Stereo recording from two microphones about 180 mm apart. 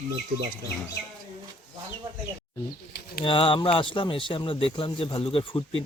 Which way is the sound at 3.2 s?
30° left (ahead or behind).